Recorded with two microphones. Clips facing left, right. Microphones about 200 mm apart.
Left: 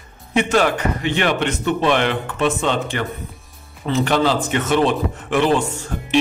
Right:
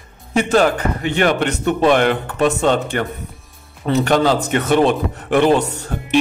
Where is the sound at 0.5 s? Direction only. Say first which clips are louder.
Right 4 dB; 40° right (ahead or behind).